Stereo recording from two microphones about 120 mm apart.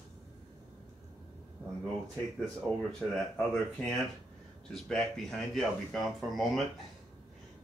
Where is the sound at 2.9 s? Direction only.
5° left (ahead or behind).